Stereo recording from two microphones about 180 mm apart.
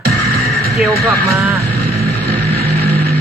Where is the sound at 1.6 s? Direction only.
60° right (ahead or behind).